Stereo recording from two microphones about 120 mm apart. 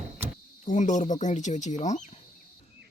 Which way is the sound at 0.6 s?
90° left.